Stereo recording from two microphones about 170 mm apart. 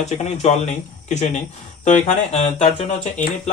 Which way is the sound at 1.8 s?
40° left (ahead or behind).